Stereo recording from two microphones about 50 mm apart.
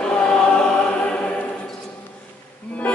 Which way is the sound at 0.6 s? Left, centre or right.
Left.